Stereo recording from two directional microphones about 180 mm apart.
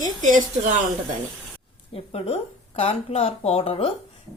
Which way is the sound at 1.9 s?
35° left (ahead or behind).